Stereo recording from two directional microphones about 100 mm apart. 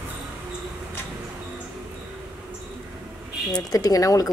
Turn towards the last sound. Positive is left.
turn(degrees=35)  # may be behind; listen again after turning